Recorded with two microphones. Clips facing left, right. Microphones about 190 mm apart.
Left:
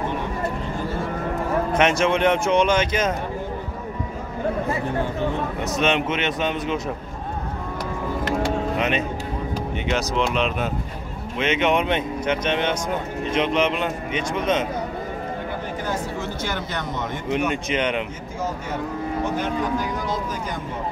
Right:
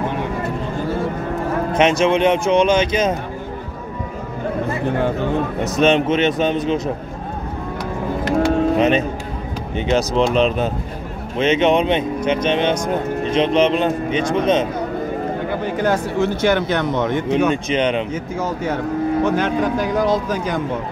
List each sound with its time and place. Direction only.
1.7 s speech: 20° right (ahead or behind)
5.8 s a man's voice: 35° right (ahead or behind)
8.3 s cattle: 35° right (ahead or behind)
9.8 s a man's voice: 35° right (ahead or behind)
15.6 s speech: 75° right (ahead or behind)
17.6 s speech: 25° right (ahead or behind)
19.2 s speech: 80° right